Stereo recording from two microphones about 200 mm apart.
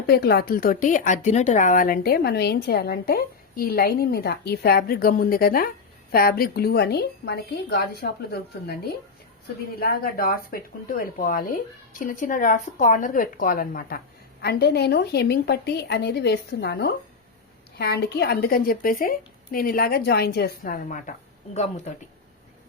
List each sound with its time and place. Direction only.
0.1 s a woman's voice: 50° left (ahead or behind); by 21.9 s 35° left (ahead or behind)